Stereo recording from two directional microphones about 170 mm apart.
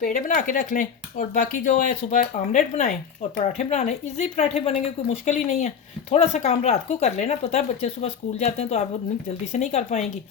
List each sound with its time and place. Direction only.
0.0 s speech: 50° left (ahead or behind)